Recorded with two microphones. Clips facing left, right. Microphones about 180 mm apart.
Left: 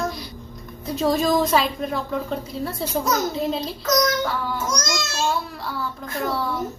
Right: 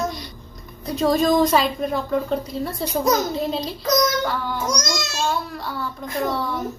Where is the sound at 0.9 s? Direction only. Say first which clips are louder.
Right 2 dB; 5° left (ahead or behind).